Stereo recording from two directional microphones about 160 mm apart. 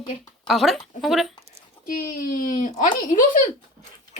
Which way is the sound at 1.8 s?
60° left (ahead or behind).